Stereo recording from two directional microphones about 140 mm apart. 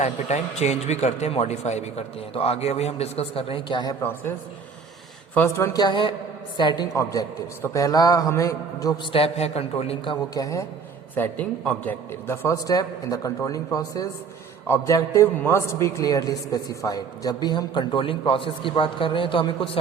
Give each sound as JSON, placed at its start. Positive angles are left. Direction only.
{"t": 0.0, "sound": "a man's voice", "side_deg": 55}
{"t": 5.3, "sound": "a man's voice", "side_deg": 15}
{"t": 9.1, "sound": "a man's voice", "side_deg": 45}
{"t": 10.3, "sound": "a man's voice", "side_deg": 25}
{"t": 11.1, "sound": "a man's voice", "side_deg": 10}